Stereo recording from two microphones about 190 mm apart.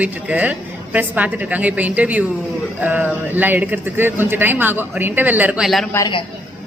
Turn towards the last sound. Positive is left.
turn(degrees=20)  # may be behind; listen again after turning